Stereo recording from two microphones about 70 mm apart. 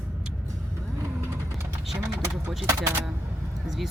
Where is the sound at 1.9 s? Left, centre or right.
Right.